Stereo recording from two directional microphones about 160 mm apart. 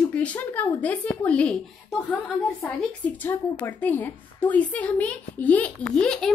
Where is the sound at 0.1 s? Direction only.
10° left (ahead or behind).